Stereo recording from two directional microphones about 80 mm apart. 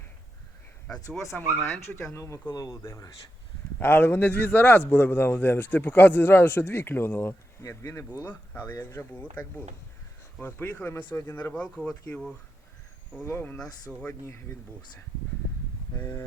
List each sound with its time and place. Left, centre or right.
0.9 s speech: centre
1.6 s a man's voice: left
3.8 s a man's voice: left
7.6 s speech: left
8.2 s a man's voice: left
11.5 s speech: centre
13.2 s a man's voice: left
13.9 s speech: centre
16.0 s speech: left